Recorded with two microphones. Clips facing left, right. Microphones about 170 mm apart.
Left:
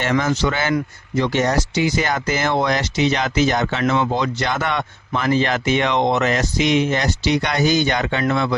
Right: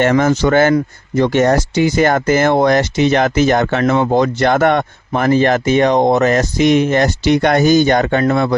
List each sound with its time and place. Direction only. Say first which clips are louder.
0.0 s speech: right 7 dB; 45° right (ahead or behind)